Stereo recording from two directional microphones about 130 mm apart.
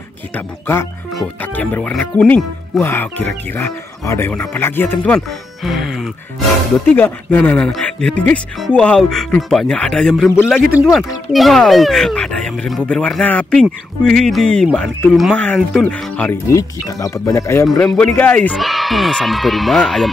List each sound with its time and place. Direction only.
1.4 s speech: 15° left (ahead or behind)
5.6 s speech: centre (ahead or behind)
6.9 s speech: 15° left (ahead or behind)
16.3 s speech: 25° left (ahead or behind)
17.7 s speech: 10° left (ahead or behind)
18.5 s speech: centre (ahead or behind)